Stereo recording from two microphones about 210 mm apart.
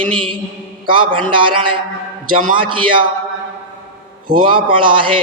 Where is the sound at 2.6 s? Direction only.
25° right (ahead or behind).